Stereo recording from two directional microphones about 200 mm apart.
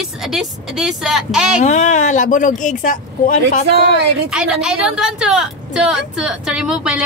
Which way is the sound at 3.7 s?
55° right (ahead or behind).